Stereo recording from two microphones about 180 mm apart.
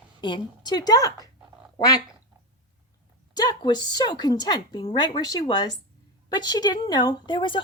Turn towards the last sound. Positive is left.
turn(degrees=25)  # may be behind; listen again after turning